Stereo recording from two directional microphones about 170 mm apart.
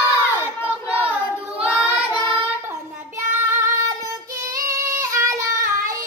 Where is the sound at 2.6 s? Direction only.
15° right (ahead or behind).